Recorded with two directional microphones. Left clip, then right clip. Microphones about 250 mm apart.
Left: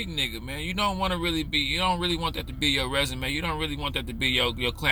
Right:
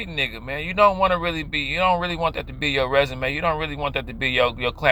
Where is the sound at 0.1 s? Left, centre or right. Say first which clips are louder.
Right 4 dB; centre.